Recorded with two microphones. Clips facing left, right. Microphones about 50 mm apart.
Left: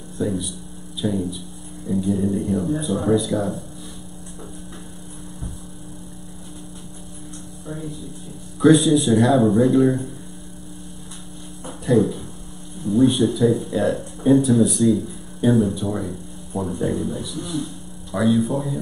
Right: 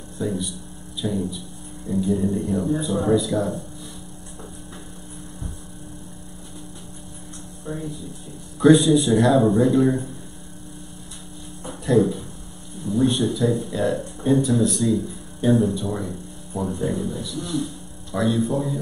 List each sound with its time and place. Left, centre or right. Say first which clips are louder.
0.2 s speech: left 2 dB; centre
8.5 s speech: even; centre
11.6 s a sound: left 1 dB; centre
12.8 s speech: left 4 dB; centre